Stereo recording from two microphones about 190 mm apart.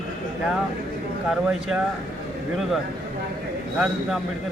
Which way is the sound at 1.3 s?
5° right (ahead or behind).